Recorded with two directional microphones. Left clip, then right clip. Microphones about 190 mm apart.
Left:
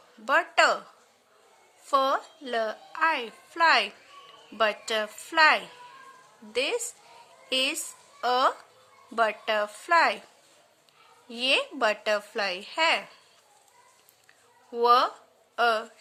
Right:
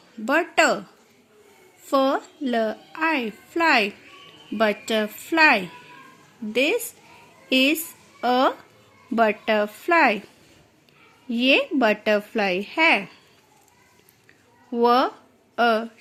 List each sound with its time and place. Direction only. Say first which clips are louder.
0.3 s a woman's voice: right 3 dB; 15° right (ahead or behind)
1.9 s a woman's voice: right 3 dB; 10° right (ahead or behind)
11.3 s a woman's voice: right 6 dB; 10° right (ahead or behind)
14.7 s a woman's voice: right 2 dB; 15° right (ahead or behind)